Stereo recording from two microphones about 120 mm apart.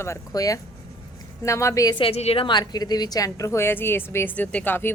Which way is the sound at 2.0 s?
60° left (ahead or behind).